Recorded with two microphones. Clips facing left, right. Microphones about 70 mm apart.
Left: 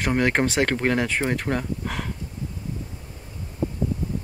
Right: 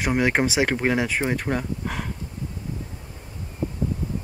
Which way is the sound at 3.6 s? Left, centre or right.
Left.